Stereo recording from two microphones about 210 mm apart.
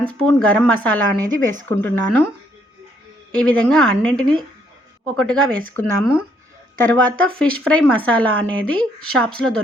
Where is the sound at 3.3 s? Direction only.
5° left (ahead or behind).